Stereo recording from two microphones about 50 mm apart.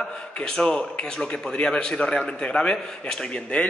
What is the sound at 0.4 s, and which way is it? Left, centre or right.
A man's voice, centre.